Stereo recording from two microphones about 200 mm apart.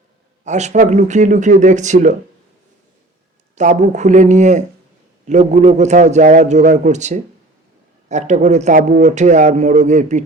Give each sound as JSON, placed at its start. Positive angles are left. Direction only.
{"t": 0.4, "sound": "a man's voice", "side_deg": -35}
{"t": 3.5, "sound": "a man's voice", "side_deg": -35}